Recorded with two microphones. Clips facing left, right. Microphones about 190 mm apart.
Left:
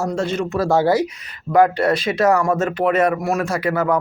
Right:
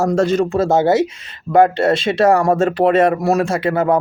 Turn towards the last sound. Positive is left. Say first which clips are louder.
# right 3 dB
turn(degrees=-25)  # may be behind; listen again after turning